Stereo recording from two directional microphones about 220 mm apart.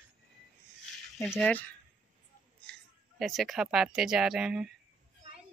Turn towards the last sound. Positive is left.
turn(degrees=-5)  # may be behind; listen again after turning